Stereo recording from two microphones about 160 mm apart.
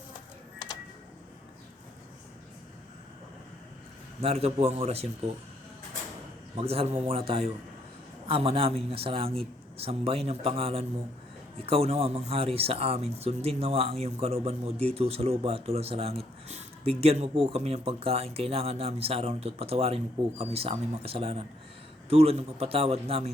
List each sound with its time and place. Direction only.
4.2 s speech: 40° right (ahead or behind)
6.6 s speech: 40° right (ahead or behind)